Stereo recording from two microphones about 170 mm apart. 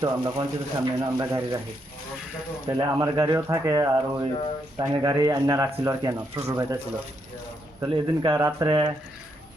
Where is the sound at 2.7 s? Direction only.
20° right (ahead or behind).